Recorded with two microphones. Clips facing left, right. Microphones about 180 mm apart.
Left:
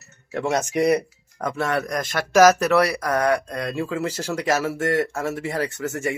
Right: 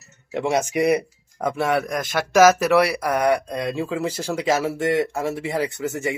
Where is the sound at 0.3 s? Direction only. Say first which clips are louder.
Right 2 dB; 15° right (ahead or behind).